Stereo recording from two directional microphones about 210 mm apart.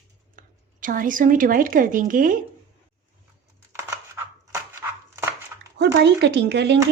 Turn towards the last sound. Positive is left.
turn(degrees=-55)  # may be behind; listen again after turning